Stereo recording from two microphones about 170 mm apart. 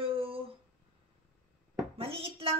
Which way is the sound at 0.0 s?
35° right (ahead or behind).